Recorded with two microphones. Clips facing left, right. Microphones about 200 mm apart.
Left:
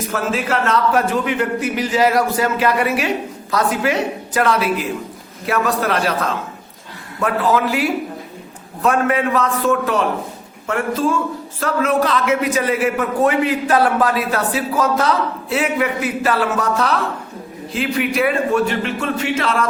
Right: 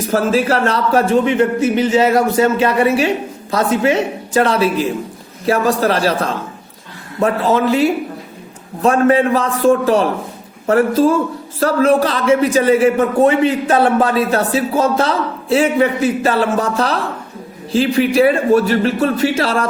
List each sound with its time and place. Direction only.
0.1 s speech: 35° right (ahead or behind)